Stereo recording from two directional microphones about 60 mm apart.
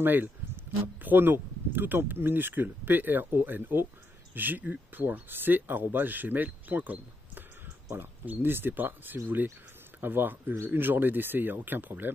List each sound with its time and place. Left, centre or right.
0.0 s speech: right